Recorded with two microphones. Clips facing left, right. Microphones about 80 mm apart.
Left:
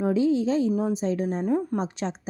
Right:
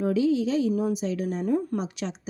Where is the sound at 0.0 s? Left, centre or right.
Left.